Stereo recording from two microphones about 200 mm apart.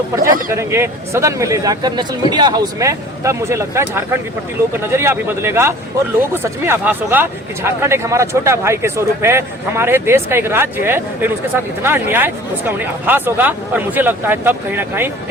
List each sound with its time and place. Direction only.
0.2 s speech: 45° right (ahead or behind)
0.5 s speech: 15° right (ahead or behind)